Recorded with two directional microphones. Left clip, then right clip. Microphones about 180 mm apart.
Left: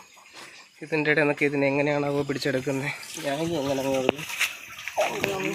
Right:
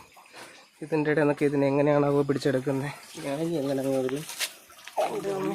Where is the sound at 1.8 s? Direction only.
45° right (ahead or behind).